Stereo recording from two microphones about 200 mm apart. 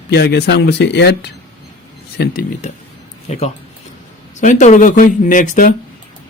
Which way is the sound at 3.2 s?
35° left (ahead or behind).